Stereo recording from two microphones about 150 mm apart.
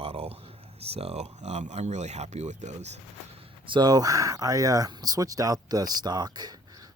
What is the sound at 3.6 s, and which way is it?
Speech, 30° right (ahead or behind).